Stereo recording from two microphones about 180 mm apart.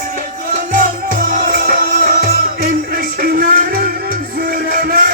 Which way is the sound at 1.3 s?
50° right (ahead or behind).